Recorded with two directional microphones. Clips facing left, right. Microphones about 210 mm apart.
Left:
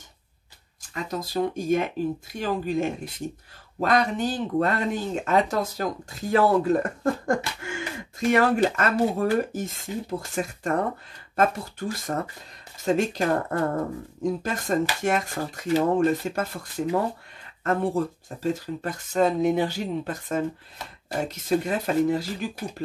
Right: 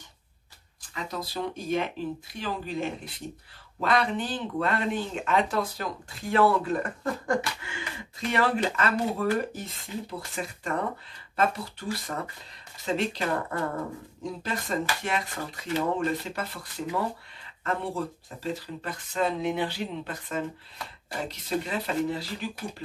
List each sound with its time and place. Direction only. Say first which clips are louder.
0.9 s speech: left 6 dB; 45° left (ahead or behind)